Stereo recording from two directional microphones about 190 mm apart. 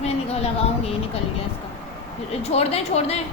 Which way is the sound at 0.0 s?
35° left (ahead or behind).